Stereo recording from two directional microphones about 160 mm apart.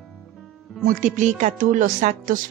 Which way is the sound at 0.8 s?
50° right (ahead or behind).